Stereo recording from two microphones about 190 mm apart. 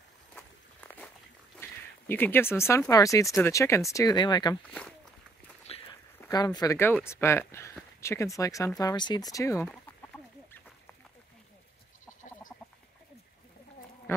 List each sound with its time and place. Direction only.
0.3 s walk: 10° left (ahead or behind)
1.6 s a sound: 10° left (ahead or behind)
2.9 s speech: 15° left (ahead or behind)
5.7 s a sound: 30° left (ahead or behind)
6.2 s speech: 20° left (ahead or behind)
9.7 s chicken: 5° left (ahead or behind)